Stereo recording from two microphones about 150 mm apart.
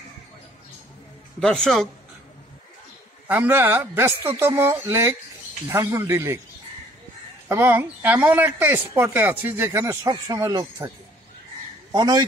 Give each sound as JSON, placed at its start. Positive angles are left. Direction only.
{"t": 1.4, "sound": "speech", "side_deg": 5}
{"t": 3.3, "sound": "speech", "side_deg": -15}
{"t": 7.4, "sound": "speech", "side_deg": -15}
{"t": 11.9, "sound": "speech", "side_deg": -25}